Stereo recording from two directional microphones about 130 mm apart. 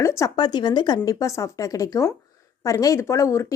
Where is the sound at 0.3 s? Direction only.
35° left (ahead or behind).